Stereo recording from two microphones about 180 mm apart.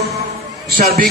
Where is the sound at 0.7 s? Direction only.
55° right (ahead or behind).